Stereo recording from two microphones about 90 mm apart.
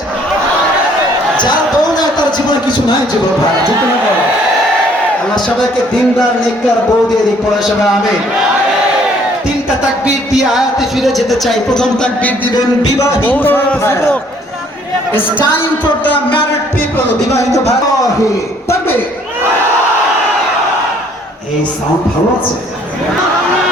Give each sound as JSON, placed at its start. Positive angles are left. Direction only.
{"t": 1.4, "sound": "a sound", "side_deg": 55}
{"t": 10.3, "sound": "speech", "side_deg": -5}
{"t": 13.2, "sound": "speech", "side_deg": 20}